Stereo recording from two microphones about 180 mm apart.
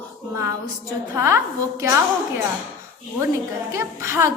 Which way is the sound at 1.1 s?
15° right (ahead or behind).